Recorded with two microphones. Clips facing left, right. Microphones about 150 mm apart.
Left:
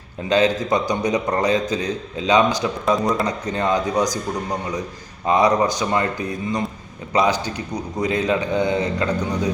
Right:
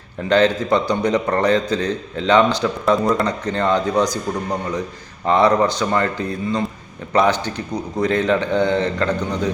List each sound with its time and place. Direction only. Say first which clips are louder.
0.3 s a man's voice: right 2 dB; 15° left (ahead or behind)
5.2 s a man's voice: right 2 dB; 15° left (ahead or behind)